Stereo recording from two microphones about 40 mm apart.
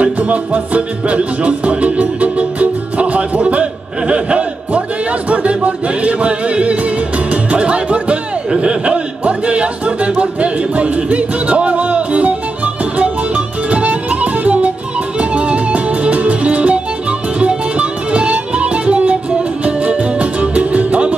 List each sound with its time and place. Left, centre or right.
0.0 s music: right
4.1 s a man's voice: right
5.3 s music: right
13.7 s music: right